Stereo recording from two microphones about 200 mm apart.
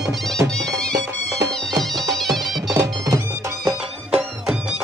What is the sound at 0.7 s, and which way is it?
Music, 5° left (ahead or behind).